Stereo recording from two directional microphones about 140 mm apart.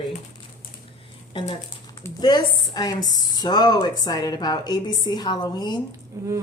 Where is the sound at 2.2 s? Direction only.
30° left (ahead or behind).